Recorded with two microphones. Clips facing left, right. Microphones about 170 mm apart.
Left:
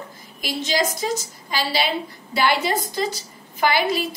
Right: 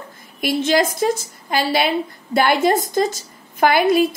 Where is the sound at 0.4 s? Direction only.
55° right (ahead or behind).